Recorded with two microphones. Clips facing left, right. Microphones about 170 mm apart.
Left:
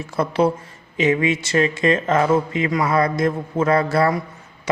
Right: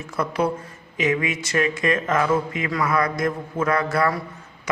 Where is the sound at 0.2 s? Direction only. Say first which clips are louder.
Left 4 dB; 30° left (ahead or behind).